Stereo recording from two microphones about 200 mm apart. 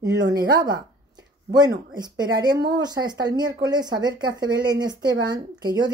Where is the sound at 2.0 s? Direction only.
20° right (ahead or behind).